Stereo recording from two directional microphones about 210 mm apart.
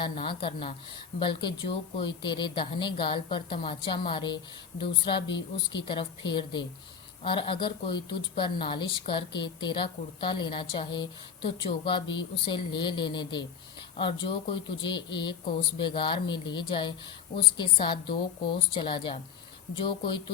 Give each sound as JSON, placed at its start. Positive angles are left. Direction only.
{"t": 0.0, "sound": "speech", "side_deg": 25}